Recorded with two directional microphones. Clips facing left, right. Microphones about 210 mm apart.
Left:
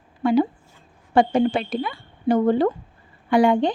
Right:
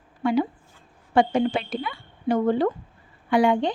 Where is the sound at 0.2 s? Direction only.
35° left (ahead or behind).